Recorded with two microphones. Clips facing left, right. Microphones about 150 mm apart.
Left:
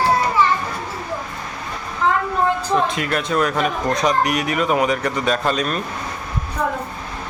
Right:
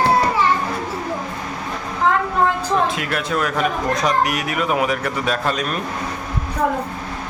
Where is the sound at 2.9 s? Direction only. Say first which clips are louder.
Left 1 dB; 5° right (ahead or behind).